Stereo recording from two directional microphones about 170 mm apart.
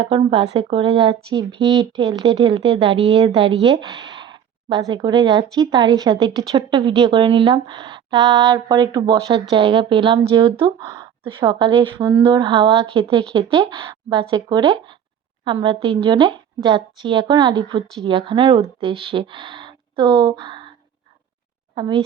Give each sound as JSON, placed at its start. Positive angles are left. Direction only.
{"t": 0.0, "sound": "speech", "side_deg": -30}
{"t": 21.8, "sound": "speech", "side_deg": -30}